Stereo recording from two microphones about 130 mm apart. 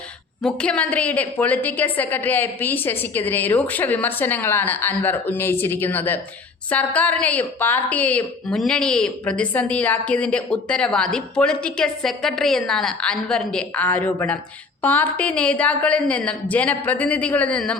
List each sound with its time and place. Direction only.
0.4 s a woman's voice: 5° left (ahead or behind)